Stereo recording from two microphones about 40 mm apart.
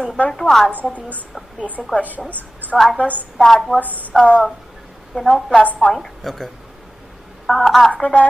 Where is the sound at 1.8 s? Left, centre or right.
Centre.